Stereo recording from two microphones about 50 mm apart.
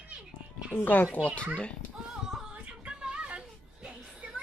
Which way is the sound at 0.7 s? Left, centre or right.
Left.